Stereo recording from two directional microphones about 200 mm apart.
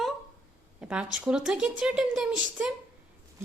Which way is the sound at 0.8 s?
5° right (ahead or behind).